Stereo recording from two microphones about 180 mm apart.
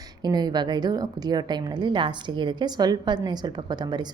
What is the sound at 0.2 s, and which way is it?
A woman's voice, 25° right (ahead or behind).